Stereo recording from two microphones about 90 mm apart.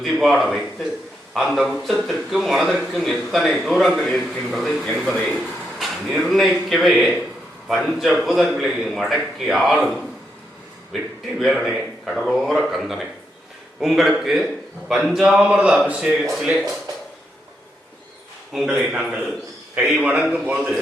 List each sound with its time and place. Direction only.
0.0 s a man's voice: centre (ahead or behind)
10.9 s a man's voice: centre (ahead or behind)
18.5 s a man's voice: 5° right (ahead or behind)